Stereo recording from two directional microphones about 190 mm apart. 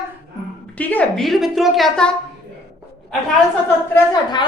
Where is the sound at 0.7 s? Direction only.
10° left (ahead or behind).